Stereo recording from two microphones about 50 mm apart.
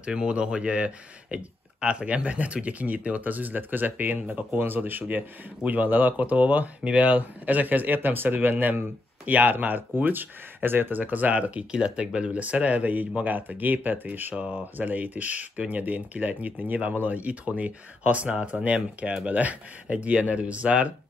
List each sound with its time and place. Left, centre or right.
0.0 s speech: right
9.2 s speech: right
14.3 s speech: right
14.8 s speech: right